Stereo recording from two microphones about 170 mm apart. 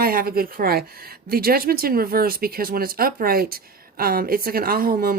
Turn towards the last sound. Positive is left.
turn(degrees=-60)  # may be behind; listen again after turning